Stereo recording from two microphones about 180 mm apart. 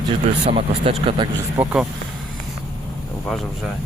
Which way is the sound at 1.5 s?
10° right (ahead or behind).